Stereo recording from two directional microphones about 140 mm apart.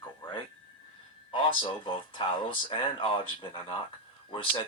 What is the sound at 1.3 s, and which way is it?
Speech, 35° left (ahead or behind).